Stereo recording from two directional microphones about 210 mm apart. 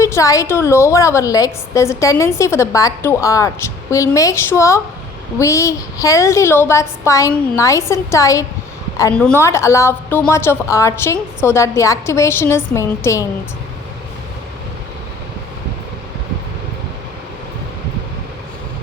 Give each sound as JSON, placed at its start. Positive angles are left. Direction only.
{"t": 0.0, "sound": "a woman's voice", "side_deg": 15}